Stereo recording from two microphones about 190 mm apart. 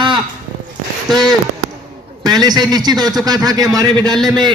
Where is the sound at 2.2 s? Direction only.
20° right (ahead or behind).